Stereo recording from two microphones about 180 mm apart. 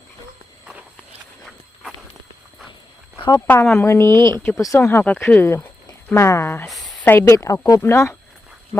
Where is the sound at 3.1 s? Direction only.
25° left (ahead or behind).